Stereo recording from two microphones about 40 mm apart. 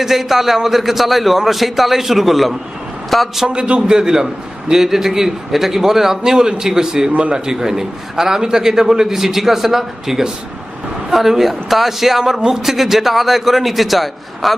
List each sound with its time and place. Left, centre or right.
0.0 s a man's voice: centre
3.5 s a man's voice: right
7.1 s a man's voice: right
7.3 s a man's voice: centre
12.6 s a man's voice: centre